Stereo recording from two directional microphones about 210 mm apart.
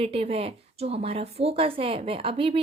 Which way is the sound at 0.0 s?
25° right (ahead or behind).